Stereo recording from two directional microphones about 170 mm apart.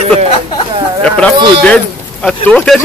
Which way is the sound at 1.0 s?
5° left (ahead or behind).